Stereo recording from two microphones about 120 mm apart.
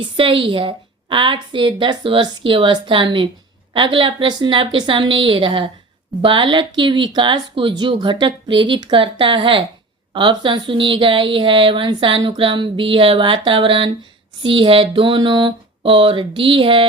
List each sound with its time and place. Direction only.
0.0 s speech: 45° right (ahead or behind)